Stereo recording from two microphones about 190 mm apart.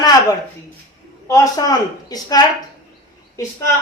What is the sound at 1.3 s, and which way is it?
Speech, 20° left (ahead or behind).